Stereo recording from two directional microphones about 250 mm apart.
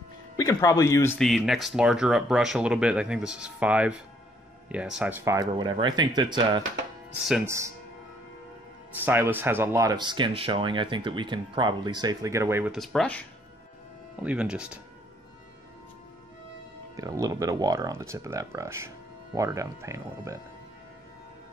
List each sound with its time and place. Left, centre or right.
0.4 s speech: centre
7.2 s speech: centre
9.0 s speech: centre
14.2 s speech: centre
16.9 s speech: centre